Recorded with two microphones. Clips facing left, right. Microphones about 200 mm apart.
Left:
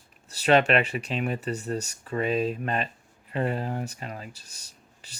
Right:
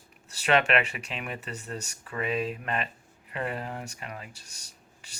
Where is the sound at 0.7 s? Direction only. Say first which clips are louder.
Left 4 dB; 35° left (ahead or behind).